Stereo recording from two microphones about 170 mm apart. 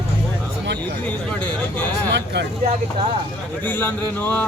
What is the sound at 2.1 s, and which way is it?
Speech, 80° right.